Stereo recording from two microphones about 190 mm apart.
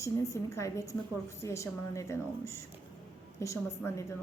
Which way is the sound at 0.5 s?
15° left (ahead or behind).